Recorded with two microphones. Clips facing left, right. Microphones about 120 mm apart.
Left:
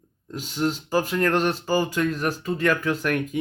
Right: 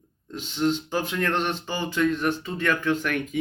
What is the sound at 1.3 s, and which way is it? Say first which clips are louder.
Speech: left 5 dB; 40° left (ahead or behind).